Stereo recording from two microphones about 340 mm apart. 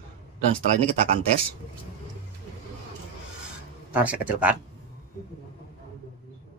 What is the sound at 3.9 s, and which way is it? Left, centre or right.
Speech, centre.